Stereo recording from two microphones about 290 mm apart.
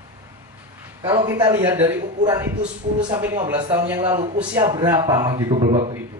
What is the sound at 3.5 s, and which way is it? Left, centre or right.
A man's voice, centre.